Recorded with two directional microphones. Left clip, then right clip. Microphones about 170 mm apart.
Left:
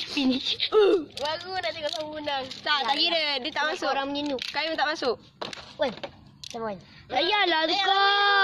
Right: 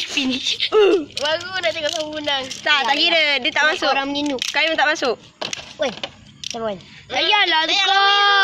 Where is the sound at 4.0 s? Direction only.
30° right (ahead or behind).